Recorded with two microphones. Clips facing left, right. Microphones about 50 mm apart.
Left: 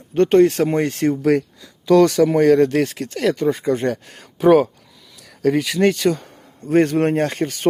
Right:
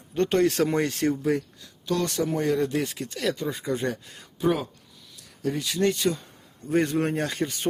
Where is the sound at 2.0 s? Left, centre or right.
Left.